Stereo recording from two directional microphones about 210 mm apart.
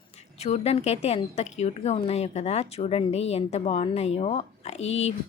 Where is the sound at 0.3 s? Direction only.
30° left (ahead or behind).